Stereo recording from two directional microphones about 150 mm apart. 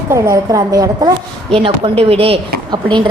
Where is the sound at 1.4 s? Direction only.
35° right (ahead or behind).